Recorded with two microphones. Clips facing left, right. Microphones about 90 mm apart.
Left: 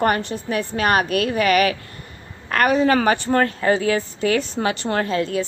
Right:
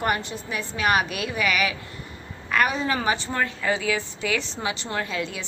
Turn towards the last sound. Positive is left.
turn(degrees=45)  # may be behind; listen again after turning